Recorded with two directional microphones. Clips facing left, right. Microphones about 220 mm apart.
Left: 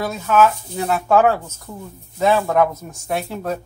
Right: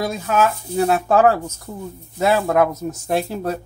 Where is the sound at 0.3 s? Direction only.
35° right (ahead or behind).